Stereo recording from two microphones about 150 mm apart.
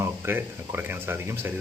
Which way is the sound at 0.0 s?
15° right (ahead or behind).